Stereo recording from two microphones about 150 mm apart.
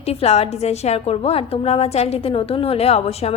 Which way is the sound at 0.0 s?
45° left (ahead or behind).